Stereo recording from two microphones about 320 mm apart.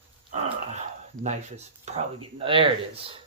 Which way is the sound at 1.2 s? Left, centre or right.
Right.